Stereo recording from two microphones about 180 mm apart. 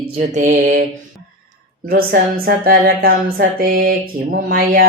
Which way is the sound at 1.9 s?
55° right (ahead or behind).